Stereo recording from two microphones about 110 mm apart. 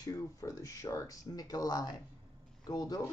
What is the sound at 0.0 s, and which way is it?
Speech, 30° left (ahead or behind).